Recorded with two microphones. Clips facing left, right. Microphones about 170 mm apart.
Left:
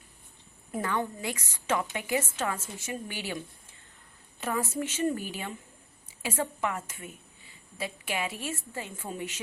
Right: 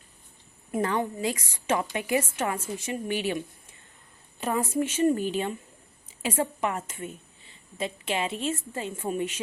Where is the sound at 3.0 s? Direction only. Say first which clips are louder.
Right 8 dB; 25° right (ahead or behind).